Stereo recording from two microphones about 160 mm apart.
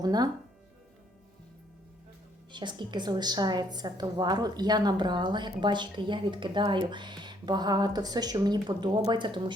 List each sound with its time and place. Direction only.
0.0 s a woman's voice: 25° right (ahead or behind)
2.5 s a woman's voice: 30° right (ahead or behind)